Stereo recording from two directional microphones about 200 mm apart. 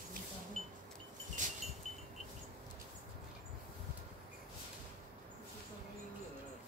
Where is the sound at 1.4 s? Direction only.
40° right (ahead or behind).